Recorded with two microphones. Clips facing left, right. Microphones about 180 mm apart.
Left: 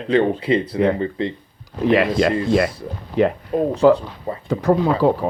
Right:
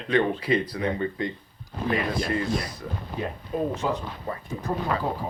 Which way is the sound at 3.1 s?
75° left (ahead or behind).